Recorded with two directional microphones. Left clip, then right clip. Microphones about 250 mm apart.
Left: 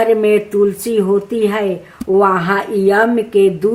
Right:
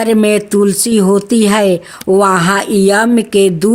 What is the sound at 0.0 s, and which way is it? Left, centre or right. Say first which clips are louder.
A woman's voice: even; right.